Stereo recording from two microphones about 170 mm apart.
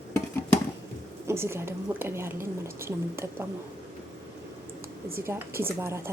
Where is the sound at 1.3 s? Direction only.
15° right (ahead or behind).